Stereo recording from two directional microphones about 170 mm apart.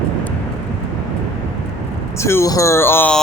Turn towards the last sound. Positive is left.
turn(degrees=10)  # may be behind; listen again after turning